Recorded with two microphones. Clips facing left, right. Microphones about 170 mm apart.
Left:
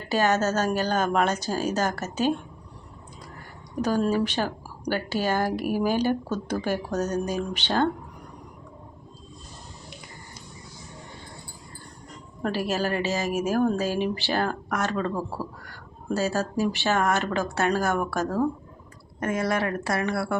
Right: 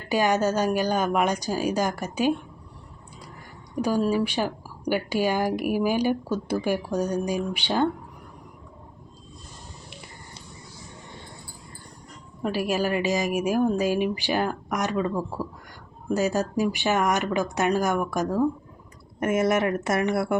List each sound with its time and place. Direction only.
0.1 s a woman's voice: 10° right (ahead or behind)
3.8 s a woman's voice: 10° right (ahead or behind)
12.4 s a woman's voice: 10° right (ahead or behind)
15.1 s speech: 10° left (ahead or behind)
15.6 s a woman's voice: 15° right (ahead or behind)